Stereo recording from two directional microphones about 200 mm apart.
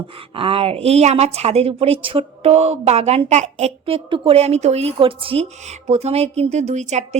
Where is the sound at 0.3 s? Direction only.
25° right (ahead or behind).